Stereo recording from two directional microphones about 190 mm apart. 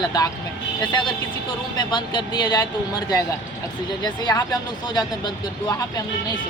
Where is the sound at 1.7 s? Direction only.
20° left (ahead or behind).